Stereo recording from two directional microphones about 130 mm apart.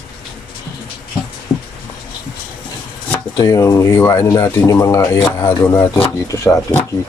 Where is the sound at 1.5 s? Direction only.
20° left (ahead or behind).